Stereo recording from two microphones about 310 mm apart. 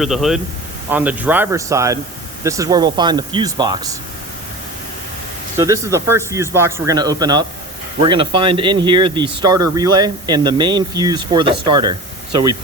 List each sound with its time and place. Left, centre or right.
0.0 s speech: centre
5.5 s speech: centre